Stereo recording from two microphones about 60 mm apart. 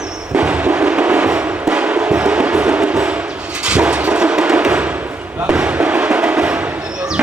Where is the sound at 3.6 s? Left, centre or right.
Centre.